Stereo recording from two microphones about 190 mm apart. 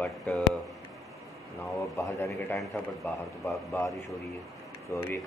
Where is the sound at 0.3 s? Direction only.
5° left (ahead or behind).